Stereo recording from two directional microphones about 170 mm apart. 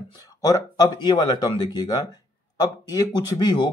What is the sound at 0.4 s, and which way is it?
Speech, 20° left (ahead or behind).